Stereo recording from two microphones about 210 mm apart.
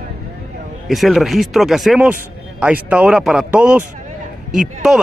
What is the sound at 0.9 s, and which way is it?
Speech, centre (ahead or behind).